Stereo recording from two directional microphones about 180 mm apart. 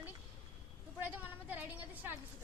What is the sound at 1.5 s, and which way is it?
Speech, 10° right (ahead or behind).